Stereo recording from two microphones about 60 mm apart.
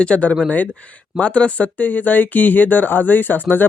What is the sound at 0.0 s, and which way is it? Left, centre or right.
Speech, left.